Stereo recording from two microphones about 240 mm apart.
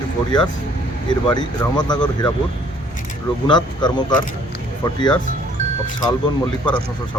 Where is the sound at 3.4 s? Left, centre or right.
Centre.